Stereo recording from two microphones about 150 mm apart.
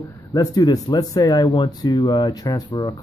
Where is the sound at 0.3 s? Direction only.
25° left (ahead or behind).